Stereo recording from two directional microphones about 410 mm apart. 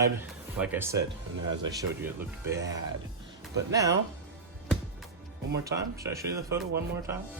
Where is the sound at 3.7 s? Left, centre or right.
Centre.